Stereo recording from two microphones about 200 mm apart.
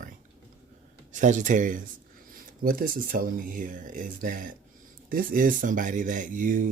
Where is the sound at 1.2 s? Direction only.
40° right (ahead or behind).